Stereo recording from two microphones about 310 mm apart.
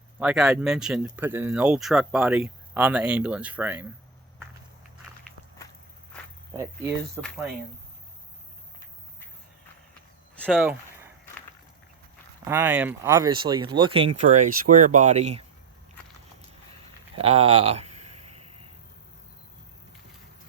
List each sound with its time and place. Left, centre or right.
0.2 s speech: centre
7.2 s speech: centre
10.4 s a sound: centre
12.5 s speech: centre
17.2 s speech: centre